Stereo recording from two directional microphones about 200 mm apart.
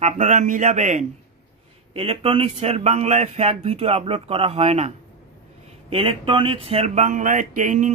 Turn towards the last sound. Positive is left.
turn(degrees=-40)  # may be behind; listen again after turning